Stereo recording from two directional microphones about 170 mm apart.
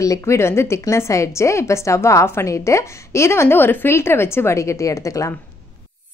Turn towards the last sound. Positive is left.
turn(degrees=20)  # may be behind; listen again after turning